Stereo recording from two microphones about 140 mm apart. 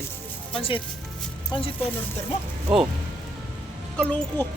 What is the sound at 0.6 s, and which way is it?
Speech, 40° left (ahead or behind).